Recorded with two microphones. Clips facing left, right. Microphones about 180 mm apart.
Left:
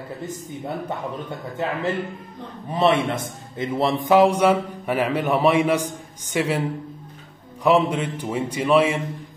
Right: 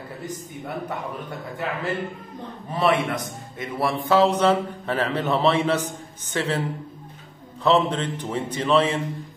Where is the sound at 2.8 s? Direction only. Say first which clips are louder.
Left 2 dB; 25° left (ahead or behind).